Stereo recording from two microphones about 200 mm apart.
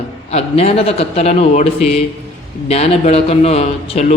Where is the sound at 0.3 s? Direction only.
30° left (ahead or behind).